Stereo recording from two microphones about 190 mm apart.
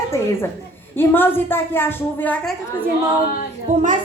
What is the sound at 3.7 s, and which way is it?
Speech, 40° right (ahead or behind).